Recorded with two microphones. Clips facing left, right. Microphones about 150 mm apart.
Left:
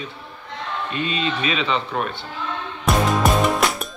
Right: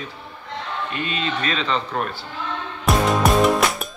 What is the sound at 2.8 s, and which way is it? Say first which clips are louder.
Music: even; centre (ahead or behind).